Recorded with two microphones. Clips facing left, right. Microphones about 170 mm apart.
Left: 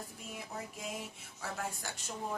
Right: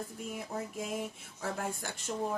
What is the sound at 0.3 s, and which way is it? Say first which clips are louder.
Speech: right 4 dB; 50° right (ahead or behind).